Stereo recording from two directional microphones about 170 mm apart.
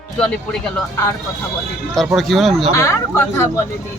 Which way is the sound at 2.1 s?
Centre (ahead or behind).